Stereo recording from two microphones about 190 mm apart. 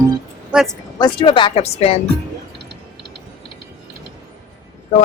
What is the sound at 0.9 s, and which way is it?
Speech, 25° left (ahead or behind).